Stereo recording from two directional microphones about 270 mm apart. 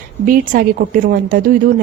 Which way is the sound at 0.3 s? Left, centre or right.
Right.